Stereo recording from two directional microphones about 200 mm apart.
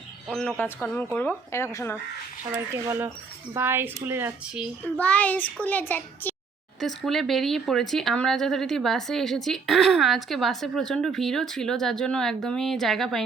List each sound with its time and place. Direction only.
0.3 s speech: 5° left (ahead or behind)
2.7 s speech: 10° right (ahead or behind)
4.9 s speech: 5° left (ahead or behind)